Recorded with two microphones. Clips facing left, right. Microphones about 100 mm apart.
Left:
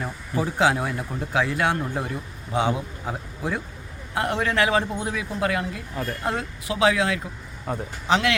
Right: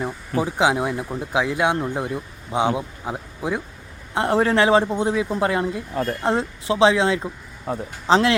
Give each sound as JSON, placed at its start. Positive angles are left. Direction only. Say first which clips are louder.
{"t": 0.0, "sound": "speech", "louder": "right 3 dB", "side_deg": -15}
{"t": 4.1, "sound": "a man's voice", "louder": "right 5 dB", "side_deg": -30}